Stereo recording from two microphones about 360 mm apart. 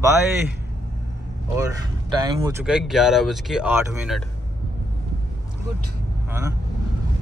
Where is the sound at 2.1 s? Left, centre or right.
Centre.